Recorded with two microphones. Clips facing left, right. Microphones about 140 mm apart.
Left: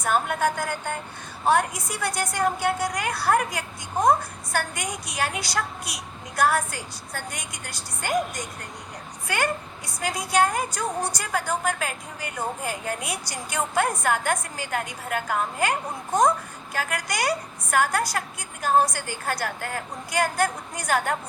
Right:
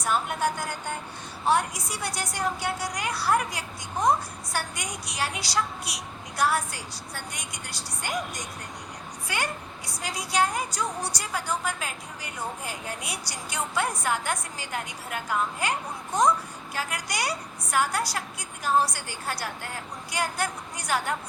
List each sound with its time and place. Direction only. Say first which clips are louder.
0.0 s a woman's voice: left 3 dB; 50° left (ahead or behind)